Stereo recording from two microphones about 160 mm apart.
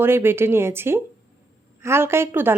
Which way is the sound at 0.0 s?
15° right (ahead or behind).